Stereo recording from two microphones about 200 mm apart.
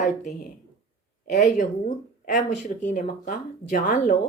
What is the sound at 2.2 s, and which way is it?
A woman's voice, 35° left (ahead or behind).